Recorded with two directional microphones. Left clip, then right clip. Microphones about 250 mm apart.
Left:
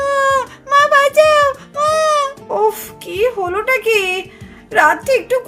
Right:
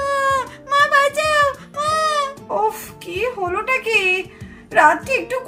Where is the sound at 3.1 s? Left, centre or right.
Left.